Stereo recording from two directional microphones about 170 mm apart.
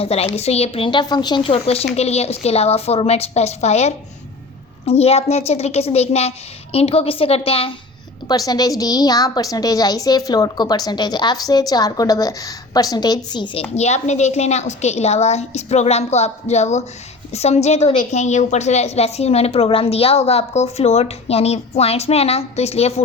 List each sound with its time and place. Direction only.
0.0 s a woman's voice: 35° left (ahead or behind)
8.3 s a woman's voice: 20° left (ahead or behind); by 23.0 s 40° left (ahead or behind)